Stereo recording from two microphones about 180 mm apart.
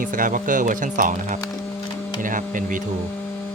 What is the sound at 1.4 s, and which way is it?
Speech, 20° left (ahead or behind).